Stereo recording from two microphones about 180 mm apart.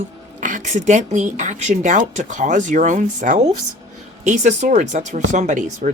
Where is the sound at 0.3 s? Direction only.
45° right (ahead or behind).